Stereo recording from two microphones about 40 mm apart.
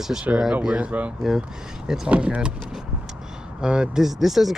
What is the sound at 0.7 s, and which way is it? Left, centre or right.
Speech, right.